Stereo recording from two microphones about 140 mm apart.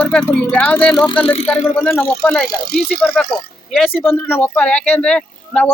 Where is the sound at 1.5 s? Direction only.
10° left (ahead or behind).